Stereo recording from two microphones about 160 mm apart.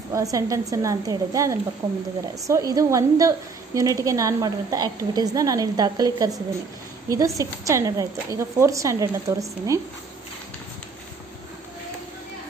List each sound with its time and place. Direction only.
0.1 s a woman's voice: 20° right (ahead or behind)